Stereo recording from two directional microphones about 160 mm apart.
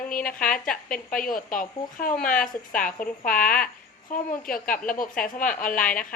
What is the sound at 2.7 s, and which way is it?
A woman's voice, 60° left (ahead or behind).